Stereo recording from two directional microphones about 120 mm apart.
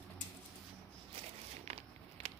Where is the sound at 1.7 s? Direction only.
60° right (ahead or behind).